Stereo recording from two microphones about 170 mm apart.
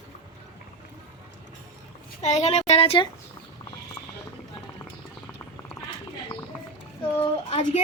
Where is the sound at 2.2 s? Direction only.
40° left (ahead or behind).